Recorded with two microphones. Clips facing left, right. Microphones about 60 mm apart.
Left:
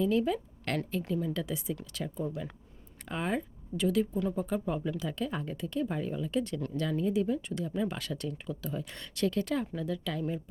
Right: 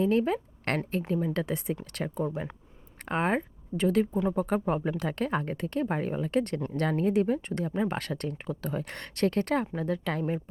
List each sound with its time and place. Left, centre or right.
0.0 s a woman's voice: right